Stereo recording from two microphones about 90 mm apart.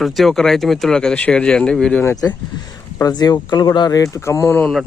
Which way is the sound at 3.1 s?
50° left (ahead or behind).